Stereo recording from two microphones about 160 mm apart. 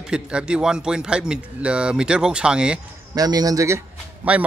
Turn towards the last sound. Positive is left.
turn(degrees=-10)  # may be behind; listen again after turning